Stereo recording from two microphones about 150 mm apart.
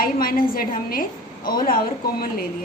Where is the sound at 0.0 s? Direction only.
75° left (ahead or behind).